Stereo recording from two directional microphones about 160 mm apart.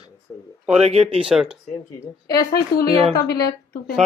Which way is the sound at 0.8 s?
40° right (ahead or behind).